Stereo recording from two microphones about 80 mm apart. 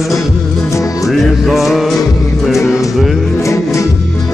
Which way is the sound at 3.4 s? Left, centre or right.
Left.